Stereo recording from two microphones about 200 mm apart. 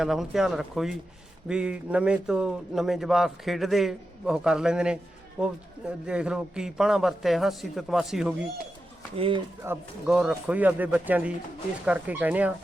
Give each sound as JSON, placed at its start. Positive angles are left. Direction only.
{"t": 0.0, "sound": "a man's voice", "side_deg": 0}
{"t": 9.1, "sound": "speech", "side_deg": -25}
{"t": 9.6, "sound": "speech", "side_deg": -5}